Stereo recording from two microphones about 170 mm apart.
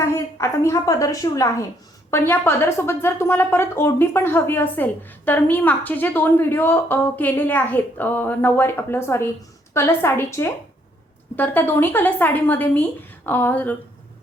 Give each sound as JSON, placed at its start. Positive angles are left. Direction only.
{"t": 0.0, "sound": "a woman's voice", "side_deg": 15}